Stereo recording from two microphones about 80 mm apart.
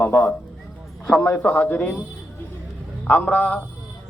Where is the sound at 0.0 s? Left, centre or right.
Left.